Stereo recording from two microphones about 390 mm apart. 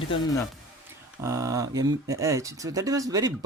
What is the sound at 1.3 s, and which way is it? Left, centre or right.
Speech, centre.